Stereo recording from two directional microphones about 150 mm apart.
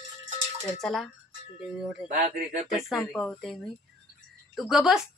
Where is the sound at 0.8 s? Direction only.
Centre (ahead or behind).